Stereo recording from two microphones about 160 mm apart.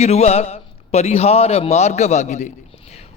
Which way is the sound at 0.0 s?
40° left (ahead or behind).